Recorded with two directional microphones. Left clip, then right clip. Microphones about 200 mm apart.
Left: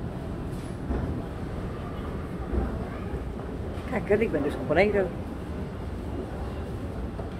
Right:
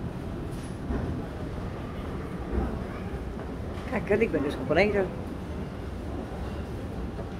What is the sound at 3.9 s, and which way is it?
Speech, 5° right (ahead or behind).